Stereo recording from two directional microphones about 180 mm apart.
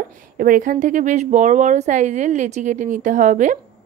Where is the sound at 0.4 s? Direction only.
50° right (ahead or behind).